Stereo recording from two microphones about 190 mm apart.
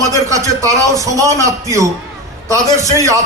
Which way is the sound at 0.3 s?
15° right (ahead or behind).